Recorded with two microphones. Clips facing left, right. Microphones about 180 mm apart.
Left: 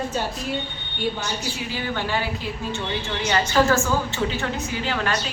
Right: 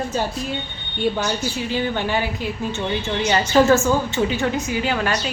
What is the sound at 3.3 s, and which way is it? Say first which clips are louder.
Speech: right 4 dB; 20° right (ahead or behind).